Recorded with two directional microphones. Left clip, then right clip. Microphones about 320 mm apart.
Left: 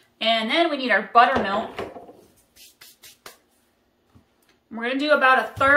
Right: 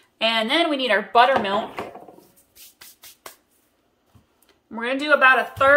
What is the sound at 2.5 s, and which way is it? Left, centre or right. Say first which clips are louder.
Music: right 1 dB; centre.